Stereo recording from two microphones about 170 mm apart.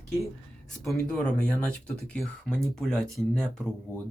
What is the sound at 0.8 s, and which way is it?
Speech, 5° left (ahead or behind).